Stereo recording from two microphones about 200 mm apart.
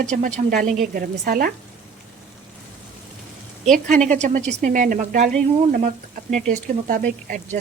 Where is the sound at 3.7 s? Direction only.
40° right (ahead or behind).